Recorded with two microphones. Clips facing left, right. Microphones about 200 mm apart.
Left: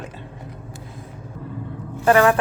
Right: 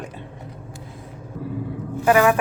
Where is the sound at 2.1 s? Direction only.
10° right (ahead or behind).